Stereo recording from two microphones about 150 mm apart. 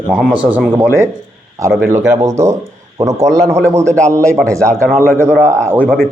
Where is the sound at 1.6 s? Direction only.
20° right (ahead or behind).